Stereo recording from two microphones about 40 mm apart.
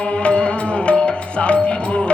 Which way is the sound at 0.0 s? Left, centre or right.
Left.